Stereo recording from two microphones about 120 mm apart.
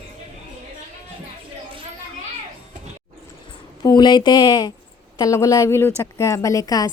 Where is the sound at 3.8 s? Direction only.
40° left (ahead or behind).